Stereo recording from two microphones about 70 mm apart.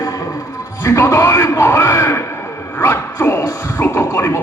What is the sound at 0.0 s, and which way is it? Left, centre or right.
Music, left.